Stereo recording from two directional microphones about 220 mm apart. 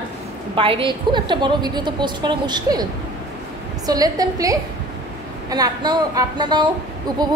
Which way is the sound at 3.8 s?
15° right (ahead or behind).